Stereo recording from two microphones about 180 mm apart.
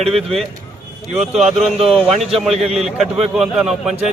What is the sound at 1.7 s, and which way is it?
Speech, 35° right (ahead or behind).